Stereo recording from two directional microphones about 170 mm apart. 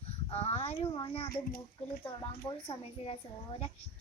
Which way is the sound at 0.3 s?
35° left (ahead or behind).